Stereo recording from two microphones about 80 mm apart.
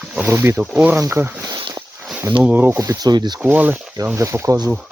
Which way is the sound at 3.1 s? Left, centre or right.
Right.